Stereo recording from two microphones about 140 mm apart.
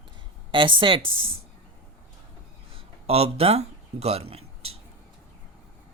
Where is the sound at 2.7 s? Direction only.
45° right (ahead or behind).